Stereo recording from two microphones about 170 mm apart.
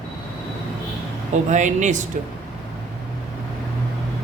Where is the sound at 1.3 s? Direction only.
45° right (ahead or behind).